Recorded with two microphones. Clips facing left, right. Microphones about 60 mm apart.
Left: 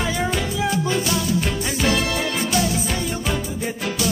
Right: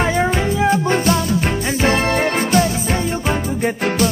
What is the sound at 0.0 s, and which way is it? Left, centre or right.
Music, right.